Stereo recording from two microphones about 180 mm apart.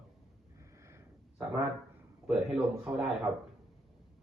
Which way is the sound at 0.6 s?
15° right (ahead or behind).